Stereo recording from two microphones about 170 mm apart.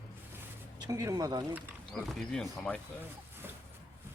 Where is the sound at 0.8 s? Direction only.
20° right (ahead or behind).